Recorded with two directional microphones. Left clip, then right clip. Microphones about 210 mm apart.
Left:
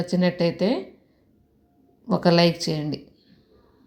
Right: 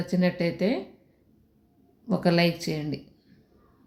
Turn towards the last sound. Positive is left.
turn(degrees=10)  # may be behind; listen again after turning